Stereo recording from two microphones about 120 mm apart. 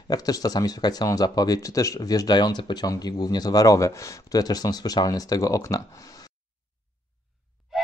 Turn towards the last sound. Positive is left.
turn(degrees=0)  # may be behind; listen again after turning